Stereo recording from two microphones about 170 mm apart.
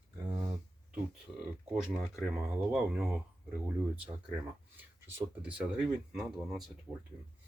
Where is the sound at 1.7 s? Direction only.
5° right (ahead or behind).